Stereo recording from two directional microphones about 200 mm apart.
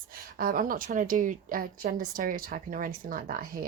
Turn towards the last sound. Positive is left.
turn(degrees=-45)  # may be behind; listen again after turning